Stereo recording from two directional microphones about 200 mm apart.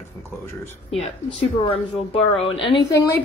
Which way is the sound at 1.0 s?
25° left (ahead or behind).